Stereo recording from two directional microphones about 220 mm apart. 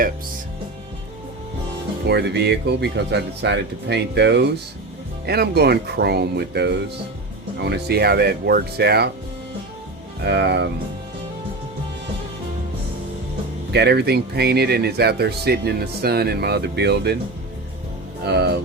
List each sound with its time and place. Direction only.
2.0 s speech: 50° right (ahead or behind)
10.2 s speech: 50° right (ahead or behind)
13.7 s speech: 50° right (ahead or behind)
18.3 s speech: 50° right (ahead or behind)